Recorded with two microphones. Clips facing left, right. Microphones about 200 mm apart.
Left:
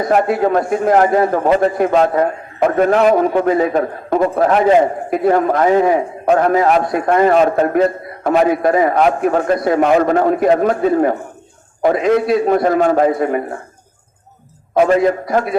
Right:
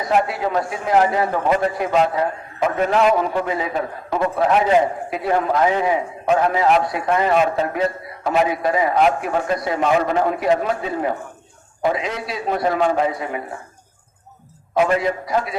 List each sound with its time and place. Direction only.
0.0 s a man's voice: 50° left (ahead or behind)
14.8 s a man's voice: 45° left (ahead or behind)